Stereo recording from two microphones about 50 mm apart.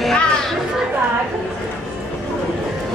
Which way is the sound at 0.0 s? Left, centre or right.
Centre.